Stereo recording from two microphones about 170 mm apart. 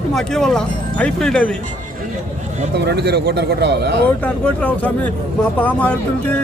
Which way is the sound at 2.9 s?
75° right (ahead or behind).